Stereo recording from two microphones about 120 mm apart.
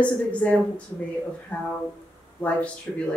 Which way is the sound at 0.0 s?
10° left (ahead or behind).